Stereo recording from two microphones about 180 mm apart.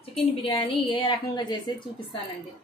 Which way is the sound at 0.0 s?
30° left (ahead or behind).